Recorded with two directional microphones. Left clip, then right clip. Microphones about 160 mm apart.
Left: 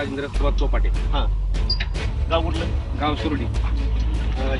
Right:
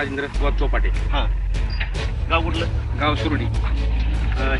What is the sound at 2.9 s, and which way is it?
Speech, 5° left (ahead or behind).